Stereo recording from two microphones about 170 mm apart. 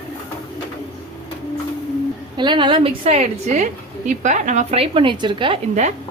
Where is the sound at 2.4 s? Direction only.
30° right (ahead or behind).